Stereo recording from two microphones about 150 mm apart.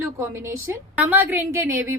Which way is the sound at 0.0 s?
15° right (ahead or behind).